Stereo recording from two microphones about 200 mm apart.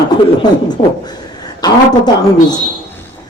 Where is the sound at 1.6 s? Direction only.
20° left (ahead or behind).